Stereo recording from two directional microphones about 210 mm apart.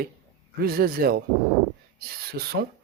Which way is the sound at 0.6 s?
45° right (ahead or behind).